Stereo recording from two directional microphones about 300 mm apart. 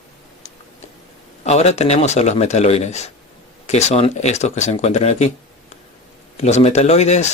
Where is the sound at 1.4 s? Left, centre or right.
Left.